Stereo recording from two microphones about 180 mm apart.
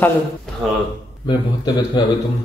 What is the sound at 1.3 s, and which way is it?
Speech, 25° left (ahead or behind).